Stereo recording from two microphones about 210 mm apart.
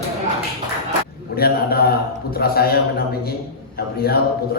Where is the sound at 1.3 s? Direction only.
45° left (ahead or behind).